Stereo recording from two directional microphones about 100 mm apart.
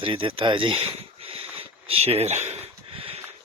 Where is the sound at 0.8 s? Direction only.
70° right (ahead or behind).